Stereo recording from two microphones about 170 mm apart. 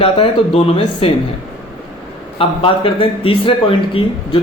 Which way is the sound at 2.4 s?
30° left (ahead or behind).